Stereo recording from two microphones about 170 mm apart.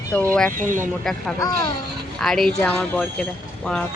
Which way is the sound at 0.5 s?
50° right (ahead or behind).